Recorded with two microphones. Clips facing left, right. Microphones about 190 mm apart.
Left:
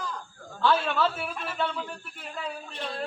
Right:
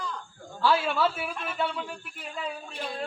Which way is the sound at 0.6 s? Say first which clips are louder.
Even; 5° right (ahead or behind).